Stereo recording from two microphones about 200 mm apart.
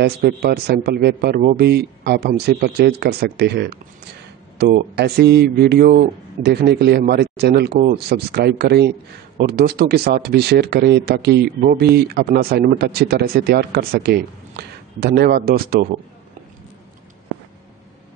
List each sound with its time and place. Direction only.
0.0 s speech: 50° right (ahead or behind)